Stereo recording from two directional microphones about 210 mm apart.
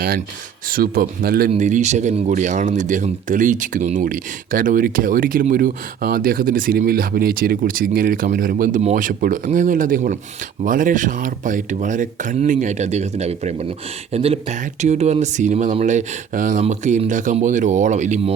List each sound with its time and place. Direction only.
0.7 s speech: 45° right (ahead or behind)